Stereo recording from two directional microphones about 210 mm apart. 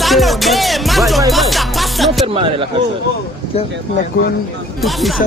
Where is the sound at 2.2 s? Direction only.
25° right (ahead or behind).